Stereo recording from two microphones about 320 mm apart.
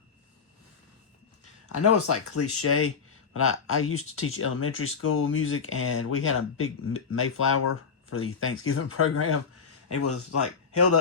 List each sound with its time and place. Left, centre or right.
1.7 s speech: left